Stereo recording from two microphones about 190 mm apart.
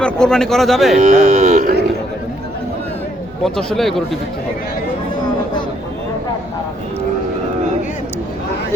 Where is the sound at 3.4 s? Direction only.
Centre (ahead or behind).